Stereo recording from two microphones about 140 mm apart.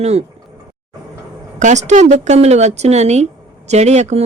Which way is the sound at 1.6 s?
60° right (ahead or behind).